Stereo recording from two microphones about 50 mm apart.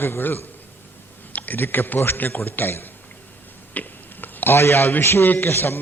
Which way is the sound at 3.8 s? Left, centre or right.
Left.